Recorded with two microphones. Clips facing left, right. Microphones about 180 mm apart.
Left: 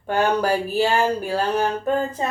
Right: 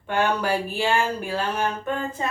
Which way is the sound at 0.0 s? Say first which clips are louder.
Left 3 dB; 40° left (ahead or behind).